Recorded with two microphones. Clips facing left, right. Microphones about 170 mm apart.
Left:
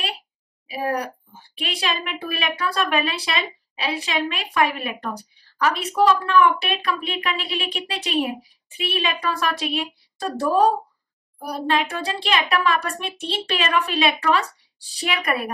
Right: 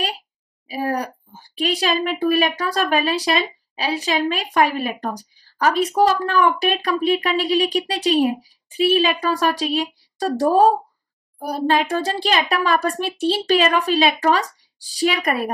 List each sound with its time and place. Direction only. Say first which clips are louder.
0.7 s a child's voice: right 2 dB; 35° right (ahead or behind)